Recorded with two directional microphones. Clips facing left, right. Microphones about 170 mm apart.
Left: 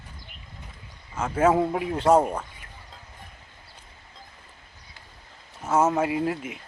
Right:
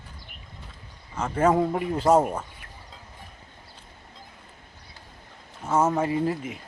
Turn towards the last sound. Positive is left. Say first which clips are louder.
# right 1 dB
turn(degrees=0)  # may be behind; listen again after turning